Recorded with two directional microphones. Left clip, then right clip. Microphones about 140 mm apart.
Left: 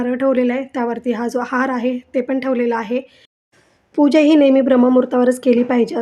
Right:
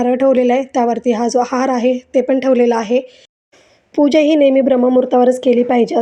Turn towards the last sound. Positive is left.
turn(degrees=-15)  # may be behind; listen again after turning